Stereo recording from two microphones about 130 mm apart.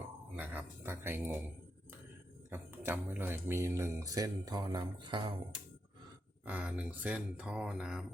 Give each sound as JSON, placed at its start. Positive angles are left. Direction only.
{"t": 0.3, "sound": "speech", "side_deg": -15}
{"t": 2.5, "sound": "speech", "side_deg": -15}
{"t": 6.4, "sound": "speech", "side_deg": -10}